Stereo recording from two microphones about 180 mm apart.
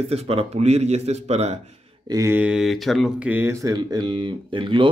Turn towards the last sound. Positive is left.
turn(degrees=-30)  # may be behind; listen again after turning